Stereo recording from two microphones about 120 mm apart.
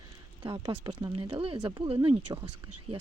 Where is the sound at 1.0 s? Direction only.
35° right (ahead or behind).